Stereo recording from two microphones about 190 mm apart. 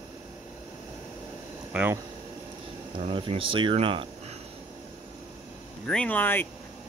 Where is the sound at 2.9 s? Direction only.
30° right (ahead or behind).